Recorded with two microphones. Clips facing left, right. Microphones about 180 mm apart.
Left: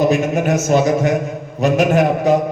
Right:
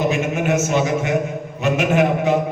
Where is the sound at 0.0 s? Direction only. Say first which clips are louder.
Left 4 dB; 40° left (ahead or behind).